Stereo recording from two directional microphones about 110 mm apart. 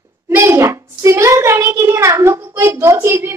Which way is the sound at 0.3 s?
20° right (ahead or behind).